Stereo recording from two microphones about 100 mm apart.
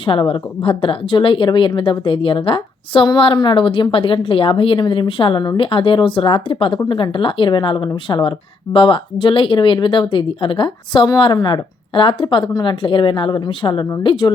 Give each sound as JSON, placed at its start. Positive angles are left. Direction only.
{"t": 0.0, "sound": "a woman's voice", "side_deg": 60}